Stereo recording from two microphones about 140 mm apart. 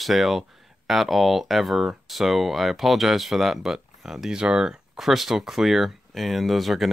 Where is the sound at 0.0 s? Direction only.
Centre (ahead or behind).